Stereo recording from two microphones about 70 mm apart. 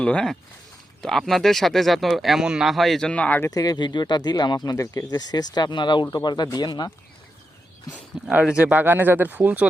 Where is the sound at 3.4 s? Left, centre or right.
Left.